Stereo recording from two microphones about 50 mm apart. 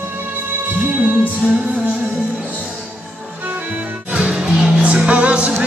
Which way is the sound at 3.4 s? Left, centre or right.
Right.